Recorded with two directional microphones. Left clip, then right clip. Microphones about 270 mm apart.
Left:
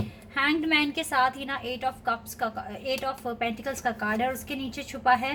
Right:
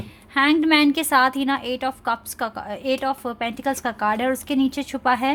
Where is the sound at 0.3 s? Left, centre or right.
Right.